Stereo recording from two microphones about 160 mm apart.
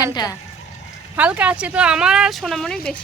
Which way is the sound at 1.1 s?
10° right (ahead or behind).